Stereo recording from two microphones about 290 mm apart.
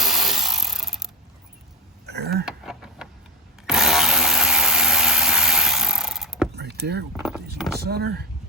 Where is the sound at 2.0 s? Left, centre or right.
Right.